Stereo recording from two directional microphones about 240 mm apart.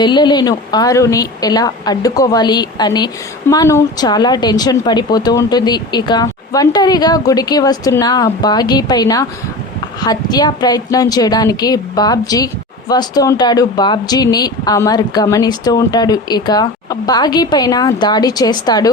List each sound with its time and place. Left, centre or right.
0.0 s speech: centre